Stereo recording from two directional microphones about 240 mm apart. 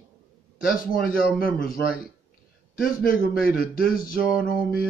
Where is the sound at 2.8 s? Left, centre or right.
Left.